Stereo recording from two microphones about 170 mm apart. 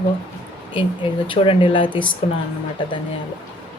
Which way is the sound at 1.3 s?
30° left (ahead or behind).